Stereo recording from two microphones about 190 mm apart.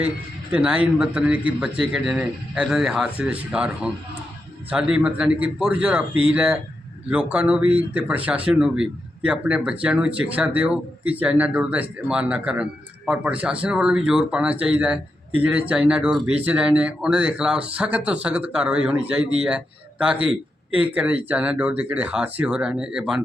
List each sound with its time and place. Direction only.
0.5 s speech: 5° right (ahead or behind)